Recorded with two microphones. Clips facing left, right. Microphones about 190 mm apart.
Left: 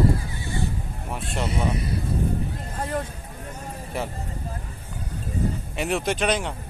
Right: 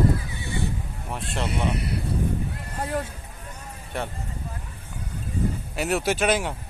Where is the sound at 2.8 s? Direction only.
Centre (ahead or behind).